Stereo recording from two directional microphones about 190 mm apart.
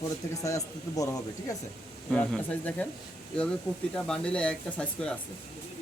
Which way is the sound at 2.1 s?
5° left (ahead or behind).